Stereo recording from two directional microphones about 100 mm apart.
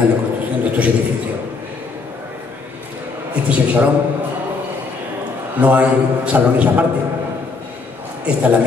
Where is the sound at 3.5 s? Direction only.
15° right (ahead or behind).